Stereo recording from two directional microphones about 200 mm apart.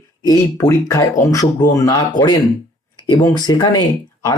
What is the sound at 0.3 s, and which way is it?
Speech, 15° left (ahead or behind).